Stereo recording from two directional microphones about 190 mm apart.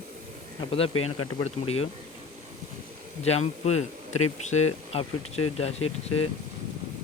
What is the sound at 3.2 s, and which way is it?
Speech, 35° left (ahead or behind).